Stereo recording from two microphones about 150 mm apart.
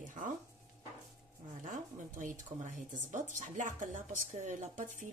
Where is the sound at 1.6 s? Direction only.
60° right (ahead or behind).